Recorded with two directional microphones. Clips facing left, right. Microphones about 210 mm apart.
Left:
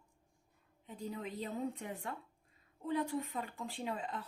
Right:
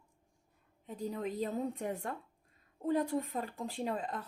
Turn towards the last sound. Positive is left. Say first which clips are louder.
# right 4 dB
turn(degrees=-40)  # may be behind; listen again after turning